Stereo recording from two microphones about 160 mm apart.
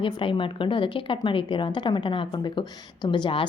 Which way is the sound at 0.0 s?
35° left (ahead or behind).